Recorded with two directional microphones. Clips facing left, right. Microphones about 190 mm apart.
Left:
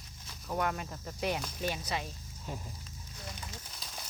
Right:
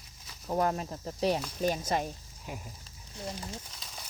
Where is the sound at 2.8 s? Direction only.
35° right (ahead or behind).